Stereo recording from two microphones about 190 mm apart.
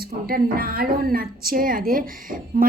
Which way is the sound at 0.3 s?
50° right (ahead or behind).